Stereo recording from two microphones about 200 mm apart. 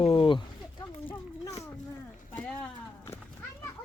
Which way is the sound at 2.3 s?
10° left (ahead or behind).